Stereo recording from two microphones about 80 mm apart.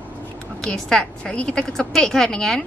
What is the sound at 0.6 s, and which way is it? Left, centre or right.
A woman's voice, centre.